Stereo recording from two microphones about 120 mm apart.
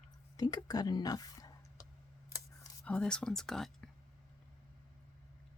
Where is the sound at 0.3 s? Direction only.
35° left (ahead or behind).